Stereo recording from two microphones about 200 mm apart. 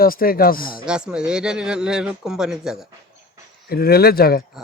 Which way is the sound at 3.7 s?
50° left (ahead or behind).